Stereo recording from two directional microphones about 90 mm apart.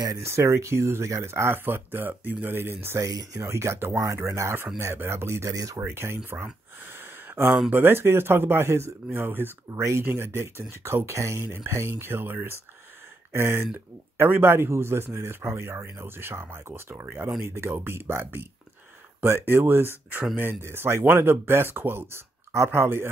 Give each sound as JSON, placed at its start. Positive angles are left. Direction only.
{"t": 0.2, "sound": "speech", "side_deg": -30}
{"t": 3.0, "sound": "speech", "side_deg": -40}
{"t": 3.4, "sound": "speech", "side_deg": -30}
{"t": 5.8, "sound": "speech", "side_deg": -25}